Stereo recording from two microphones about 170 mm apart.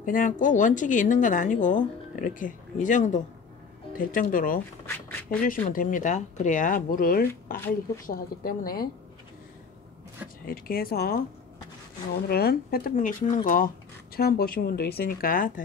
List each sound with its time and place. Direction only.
0.0 s speech: 50° left (ahead or behind)
10.4 s speech: 60° left (ahead or behind)
12.3 s speech: 65° left (ahead or behind)
12.9 s speech: 50° left (ahead or behind)
14.1 s speech: 60° left (ahead or behind)